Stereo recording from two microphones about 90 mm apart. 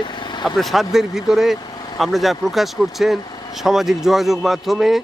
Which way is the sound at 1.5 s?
45° left (ahead or behind).